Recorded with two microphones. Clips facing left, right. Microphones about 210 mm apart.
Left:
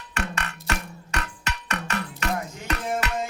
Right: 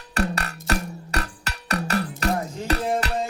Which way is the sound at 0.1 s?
35° right (ahead or behind).